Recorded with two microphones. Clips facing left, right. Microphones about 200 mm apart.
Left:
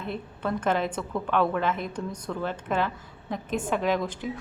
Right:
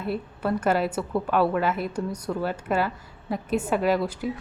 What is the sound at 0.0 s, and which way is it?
Speech, 5° right (ahead or behind).